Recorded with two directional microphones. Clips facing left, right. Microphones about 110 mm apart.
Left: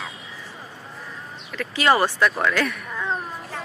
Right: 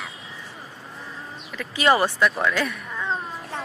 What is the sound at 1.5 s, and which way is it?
Speech, 15° right (ahead or behind).